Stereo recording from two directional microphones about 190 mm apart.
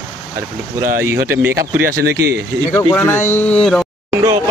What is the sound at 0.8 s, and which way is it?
Speech, 15° right (ahead or behind).